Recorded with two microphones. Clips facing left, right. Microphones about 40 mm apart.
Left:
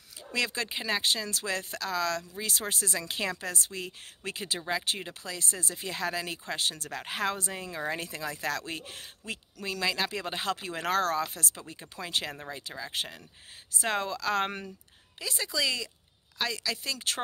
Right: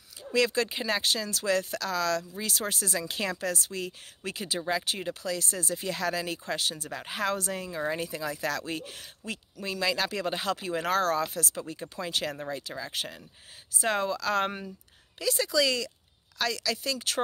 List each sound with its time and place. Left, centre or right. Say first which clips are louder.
0.3 s speech: right 5 dB; left
6.8 s speech: even; left
8.0 s a woman's voice: right 3 dB; left